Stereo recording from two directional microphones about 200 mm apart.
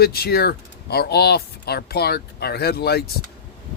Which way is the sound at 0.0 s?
50° left (ahead or behind).